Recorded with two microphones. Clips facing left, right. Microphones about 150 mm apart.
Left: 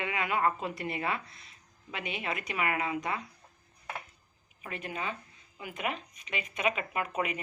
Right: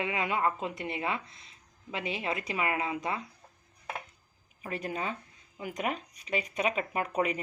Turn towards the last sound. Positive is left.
turn(degrees=-35)  # may be behind; listen again after turning